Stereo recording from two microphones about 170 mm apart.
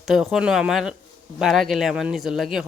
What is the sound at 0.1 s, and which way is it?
Speech, centre (ahead or behind).